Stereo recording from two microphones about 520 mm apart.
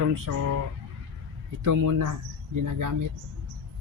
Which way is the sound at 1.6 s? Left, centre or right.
Right.